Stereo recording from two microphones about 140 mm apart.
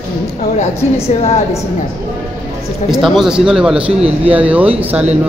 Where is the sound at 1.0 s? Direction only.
50° left (ahead or behind).